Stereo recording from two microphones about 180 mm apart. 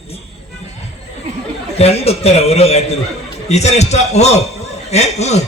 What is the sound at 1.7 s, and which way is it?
A man's voice, 35° left (ahead or behind).